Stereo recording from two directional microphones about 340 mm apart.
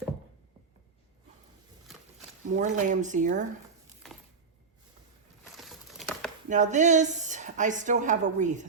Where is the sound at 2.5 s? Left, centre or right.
Right.